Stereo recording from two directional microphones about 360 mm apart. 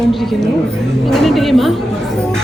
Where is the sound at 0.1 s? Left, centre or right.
Centre.